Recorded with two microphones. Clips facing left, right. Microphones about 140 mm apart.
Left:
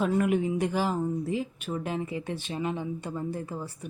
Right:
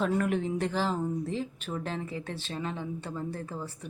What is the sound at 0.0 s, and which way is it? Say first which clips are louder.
Speech: left 3 dB; 10° left (ahead or behind).